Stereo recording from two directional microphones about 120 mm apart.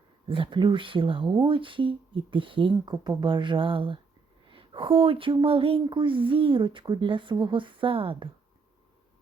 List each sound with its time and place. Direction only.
0.3 s speech: 45° right (ahead or behind)